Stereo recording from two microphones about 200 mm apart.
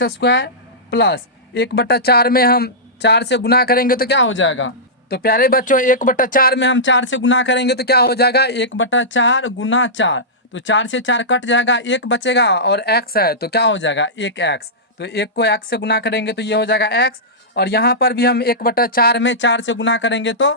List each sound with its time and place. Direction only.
0.0 s a man's voice: 60° left (ahead or behind)
4.2 s a man's voice: 70° left (ahead or behind)